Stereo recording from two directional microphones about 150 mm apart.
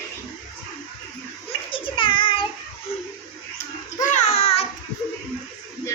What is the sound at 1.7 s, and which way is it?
Child singing, 35° left (ahead or behind).